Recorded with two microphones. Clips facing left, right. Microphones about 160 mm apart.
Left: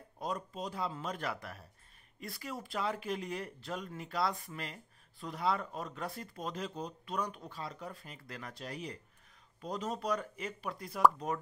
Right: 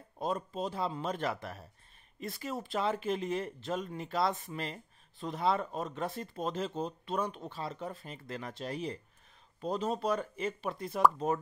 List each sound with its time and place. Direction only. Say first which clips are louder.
0.2 s speech: right 4 dB; 25° right (ahead or behind)